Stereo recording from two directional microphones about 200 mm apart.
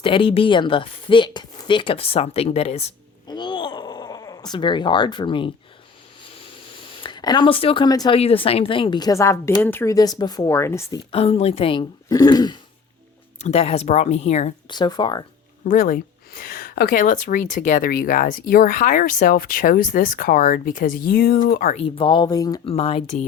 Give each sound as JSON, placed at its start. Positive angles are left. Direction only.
{"t": 0.0, "sound": "speech", "side_deg": 25}
{"t": 6.9, "sound": "speech", "side_deg": 25}
{"t": 11.1, "sound": "speech", "side_deg": 30}
{"t": 13.4, "sound": "speech", "side_deg": 30}
{"t": 14.7, "sound": "speech", "side_deg": 20}
{"t": 15.6, "sound": "a woman's voice", "side_deg": 40}
{"t": 21.8, "sound": "speech", "side_deg": 25}